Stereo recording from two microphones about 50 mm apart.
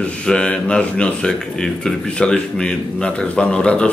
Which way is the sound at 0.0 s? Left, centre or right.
Left.